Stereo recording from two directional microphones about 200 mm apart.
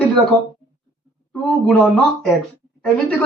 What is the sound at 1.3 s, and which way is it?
Speech, 5° left (ahead or behind).